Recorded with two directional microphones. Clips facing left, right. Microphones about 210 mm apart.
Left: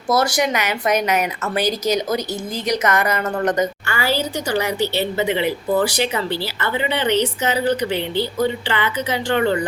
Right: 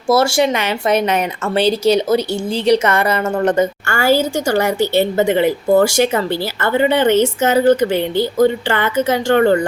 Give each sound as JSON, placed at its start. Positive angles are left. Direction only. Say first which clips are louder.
{"t": 0.1, "sound": "speech", "louder": "right 5 dB", "side_deg": -25}
{"t": 3.8, "sound": "speech", "louder": "right 7 dB", "side_deg": -50}